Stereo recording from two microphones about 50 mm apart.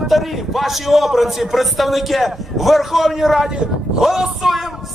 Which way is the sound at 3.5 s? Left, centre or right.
Centre.